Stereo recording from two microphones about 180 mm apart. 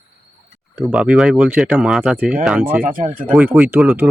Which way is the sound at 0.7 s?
5° right (ahead or behind).